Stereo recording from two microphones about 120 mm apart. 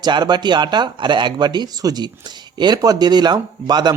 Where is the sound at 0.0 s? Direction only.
35° right (ahead or behind).